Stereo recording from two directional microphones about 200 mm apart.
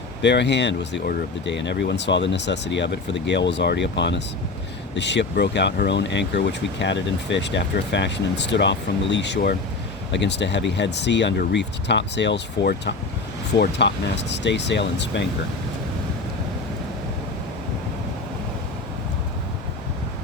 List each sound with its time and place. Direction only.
0.2 s speech: 60° left (ahead or behind)